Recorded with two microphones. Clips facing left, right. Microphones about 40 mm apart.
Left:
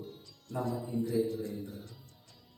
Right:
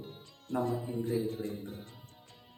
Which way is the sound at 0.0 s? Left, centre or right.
Right.